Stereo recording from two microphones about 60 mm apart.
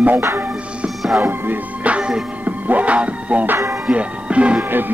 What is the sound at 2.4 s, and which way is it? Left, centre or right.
Music, right.